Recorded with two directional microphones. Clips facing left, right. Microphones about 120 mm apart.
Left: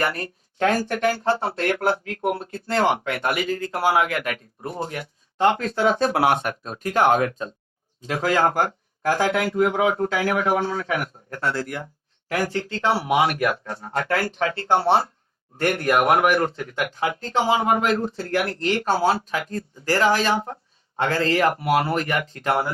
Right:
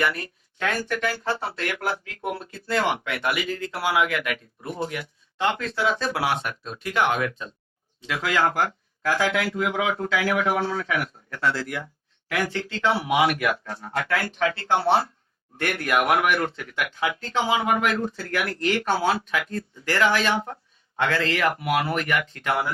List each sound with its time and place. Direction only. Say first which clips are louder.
0.0 s speech: left 1 dB; 40° left (ahead or behind)